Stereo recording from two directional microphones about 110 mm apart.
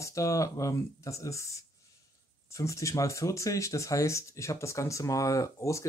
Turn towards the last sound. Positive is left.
turn(degrees=30)  # may be behind; listen again after turning